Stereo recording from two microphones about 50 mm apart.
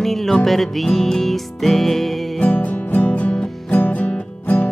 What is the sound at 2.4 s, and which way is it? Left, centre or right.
Music, left.